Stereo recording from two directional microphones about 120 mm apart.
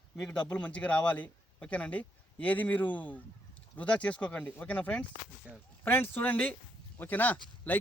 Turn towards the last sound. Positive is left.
turn(degrees=15)  # may be behind; listen again after turning